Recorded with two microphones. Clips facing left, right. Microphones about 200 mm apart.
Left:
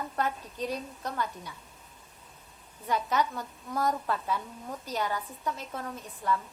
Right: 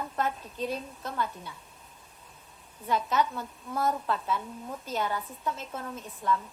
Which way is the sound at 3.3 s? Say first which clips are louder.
Even; 40° left (ahead or behind).